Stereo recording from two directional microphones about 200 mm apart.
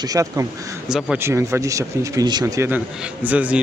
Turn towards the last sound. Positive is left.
turn(degrees=-5)  # may be behind; listen again after turning